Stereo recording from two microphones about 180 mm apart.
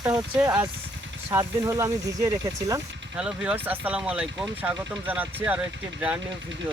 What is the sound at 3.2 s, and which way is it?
Speech, 5° right (ahead or behind).